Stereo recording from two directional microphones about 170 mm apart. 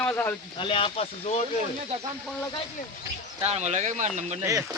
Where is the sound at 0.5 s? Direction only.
30° left (ahead or behind).